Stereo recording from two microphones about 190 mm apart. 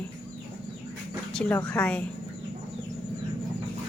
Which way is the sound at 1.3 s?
5° left (ahead or behind).